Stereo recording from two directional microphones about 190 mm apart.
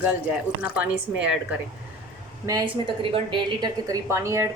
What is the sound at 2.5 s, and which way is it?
A woman's voice, 20° right (ahead or behind).